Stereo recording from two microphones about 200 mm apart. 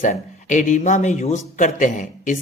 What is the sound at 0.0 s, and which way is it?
Speech, 40° left (ahead or behind).